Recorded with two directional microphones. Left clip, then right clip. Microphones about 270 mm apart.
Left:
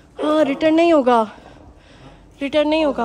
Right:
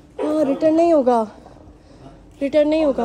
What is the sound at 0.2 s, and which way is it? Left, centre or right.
A woman's voice, left.